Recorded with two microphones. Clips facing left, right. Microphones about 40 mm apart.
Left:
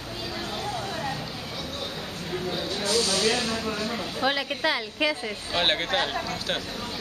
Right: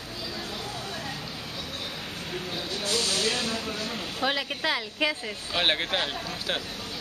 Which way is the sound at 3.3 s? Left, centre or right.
Left.